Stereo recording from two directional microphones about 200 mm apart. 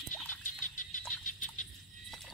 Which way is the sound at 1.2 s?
40° left (ahead or behind).